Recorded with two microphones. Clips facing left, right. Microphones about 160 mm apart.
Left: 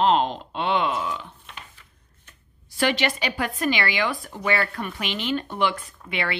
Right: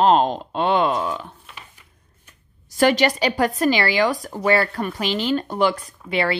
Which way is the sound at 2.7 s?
40° right (ahead or behind).